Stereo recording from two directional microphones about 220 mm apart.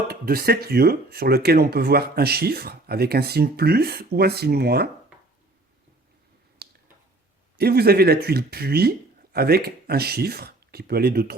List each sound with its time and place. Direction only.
0.1 s speech: 45° right (ahead or behind)
7.6 s speech: 45° right (ahead or behind)